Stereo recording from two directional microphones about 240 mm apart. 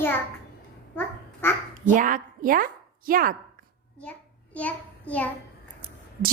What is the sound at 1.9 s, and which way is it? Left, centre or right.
A woman's voice, right.